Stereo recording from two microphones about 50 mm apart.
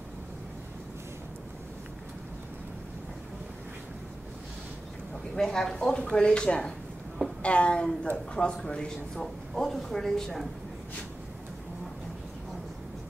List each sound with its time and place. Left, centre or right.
5.3 s a man's voice: centre